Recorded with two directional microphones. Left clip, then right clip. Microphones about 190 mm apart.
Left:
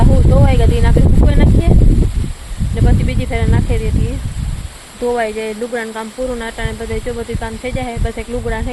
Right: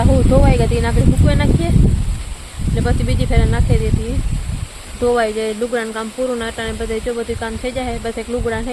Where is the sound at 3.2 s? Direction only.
15° right (ahead or behind).